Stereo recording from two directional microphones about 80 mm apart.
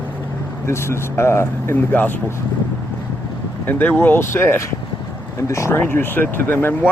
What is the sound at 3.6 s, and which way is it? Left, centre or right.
Speech, left.